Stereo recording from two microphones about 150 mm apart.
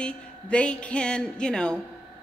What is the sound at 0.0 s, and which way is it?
A woman's voice, 5° left (ahead or behind).